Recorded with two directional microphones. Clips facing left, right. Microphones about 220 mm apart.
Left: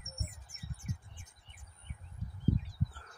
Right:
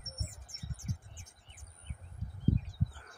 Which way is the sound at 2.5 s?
55° right (ahead or behind).